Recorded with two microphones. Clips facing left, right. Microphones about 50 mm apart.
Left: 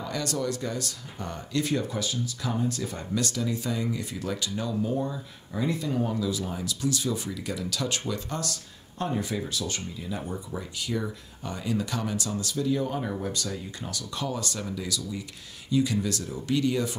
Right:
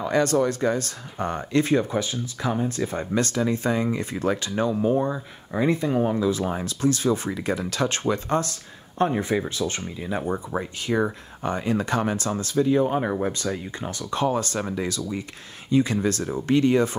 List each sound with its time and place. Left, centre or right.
0.0 s speech: right